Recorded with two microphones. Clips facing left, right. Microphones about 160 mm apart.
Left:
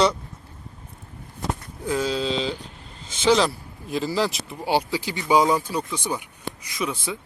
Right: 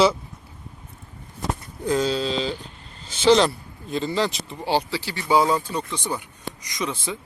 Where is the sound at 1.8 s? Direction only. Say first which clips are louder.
Right 2 dB; 5° left (ahead or behind).